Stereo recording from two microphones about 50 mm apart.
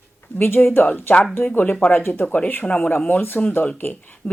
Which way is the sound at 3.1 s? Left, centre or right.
Left.